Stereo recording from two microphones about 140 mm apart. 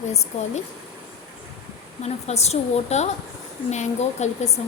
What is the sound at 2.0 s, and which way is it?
Speech, 50° left (ahead or behind).